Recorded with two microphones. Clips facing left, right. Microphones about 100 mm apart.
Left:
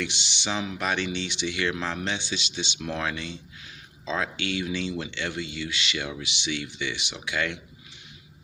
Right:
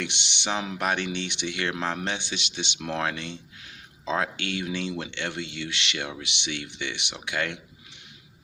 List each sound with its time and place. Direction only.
0.0 s speech: 65° right (ahead or behind)